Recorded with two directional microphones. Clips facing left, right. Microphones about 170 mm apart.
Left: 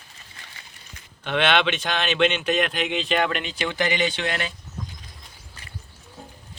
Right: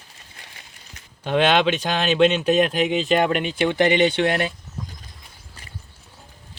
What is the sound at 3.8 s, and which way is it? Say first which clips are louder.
Speech: right 7 dB; 60° right (ahead or behind).